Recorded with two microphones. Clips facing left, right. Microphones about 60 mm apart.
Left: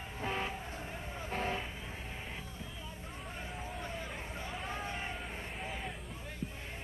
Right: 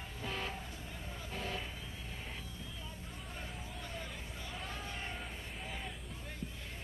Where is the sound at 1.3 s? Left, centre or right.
Left.